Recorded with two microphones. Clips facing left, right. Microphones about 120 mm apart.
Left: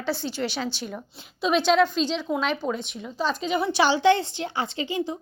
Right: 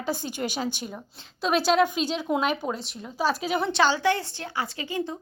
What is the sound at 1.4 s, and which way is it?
A woman's voice, 5° right (ahead or behind).